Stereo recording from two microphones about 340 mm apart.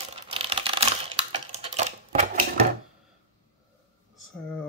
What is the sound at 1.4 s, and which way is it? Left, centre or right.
Typewriter, centre.